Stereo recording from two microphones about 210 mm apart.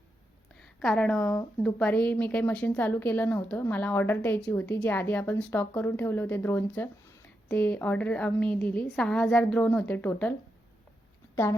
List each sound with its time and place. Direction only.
0.8 s a woman's voice: 5° left (ahead or behind)